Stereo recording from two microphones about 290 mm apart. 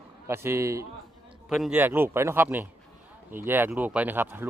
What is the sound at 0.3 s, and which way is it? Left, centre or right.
Speech, centre.